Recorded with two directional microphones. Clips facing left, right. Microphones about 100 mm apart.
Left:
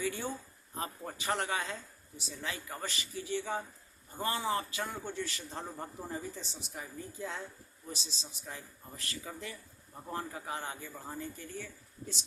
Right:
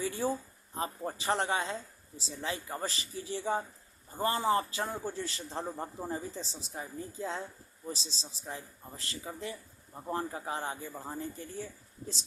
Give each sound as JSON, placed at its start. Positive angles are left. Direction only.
{"t": 0.0, "sound": "a man's voice", "side_deg": -35}